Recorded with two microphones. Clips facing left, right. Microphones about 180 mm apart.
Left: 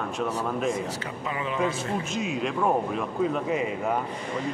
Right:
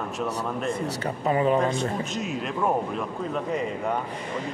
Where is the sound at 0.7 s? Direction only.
70° right (ahead or behind).